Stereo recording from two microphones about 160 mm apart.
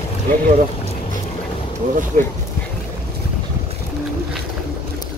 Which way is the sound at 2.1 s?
60° right (ahead or behind).